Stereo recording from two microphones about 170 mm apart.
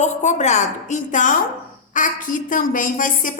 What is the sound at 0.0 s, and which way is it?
A woman's voice, 45° left (ahead or behind).